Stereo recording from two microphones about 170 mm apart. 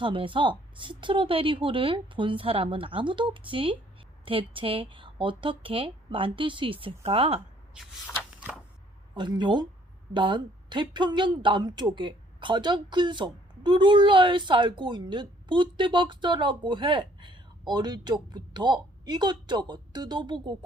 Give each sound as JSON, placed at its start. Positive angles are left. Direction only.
{"t": 0.0, "sound": "a woman's voice", "side_deg": -30}
{"t": 8.4, "sound": "a sound", "side_deg": -5}
{"t": 9.1, "sound": "speech", "side_deg": -25}